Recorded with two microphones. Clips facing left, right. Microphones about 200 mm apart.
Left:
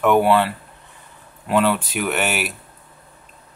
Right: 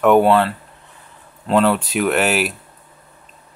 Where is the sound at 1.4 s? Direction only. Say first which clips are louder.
Right 3 dB; centre (ahead or behind).